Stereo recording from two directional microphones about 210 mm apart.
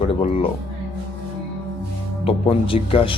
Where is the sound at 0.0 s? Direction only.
30° left (ahead or behind).